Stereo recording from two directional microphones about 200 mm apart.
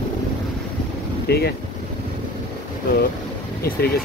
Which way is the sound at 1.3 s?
55° left (ahead or behind).